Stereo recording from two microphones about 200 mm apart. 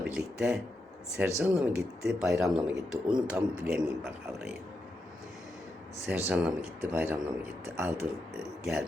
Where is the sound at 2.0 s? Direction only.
Centre (ahead or behind).